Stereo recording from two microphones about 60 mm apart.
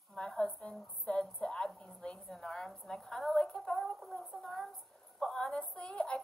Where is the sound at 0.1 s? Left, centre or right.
Centre.